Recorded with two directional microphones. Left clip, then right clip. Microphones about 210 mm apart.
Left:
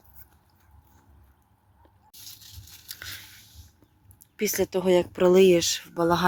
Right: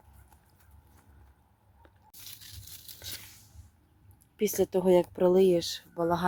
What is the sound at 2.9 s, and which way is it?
Biting, 5° left (ahead or behind).